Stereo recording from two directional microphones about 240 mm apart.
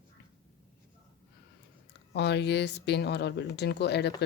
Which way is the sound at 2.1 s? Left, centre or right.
Left.